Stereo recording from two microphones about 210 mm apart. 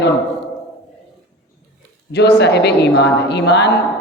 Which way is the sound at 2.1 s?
55° left (ahead or behind).